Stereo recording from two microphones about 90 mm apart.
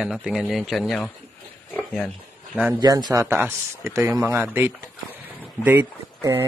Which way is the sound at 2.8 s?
50° right (ahead or behind).